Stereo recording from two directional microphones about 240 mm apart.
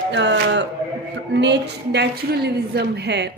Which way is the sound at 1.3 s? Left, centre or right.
Right.